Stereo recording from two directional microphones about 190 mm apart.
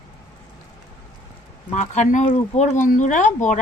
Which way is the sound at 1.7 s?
40° left (ahead or behind).